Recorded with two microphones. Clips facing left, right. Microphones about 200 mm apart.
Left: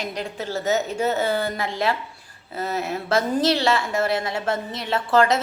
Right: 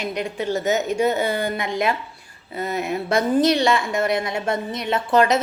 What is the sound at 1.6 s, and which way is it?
A woman's voice, 30° left (ahead or behind).